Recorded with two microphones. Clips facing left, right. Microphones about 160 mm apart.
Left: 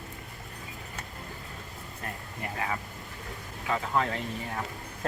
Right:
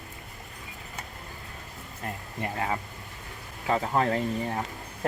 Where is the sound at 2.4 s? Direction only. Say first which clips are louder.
Right 3 dB; 30° right (ahead or behind).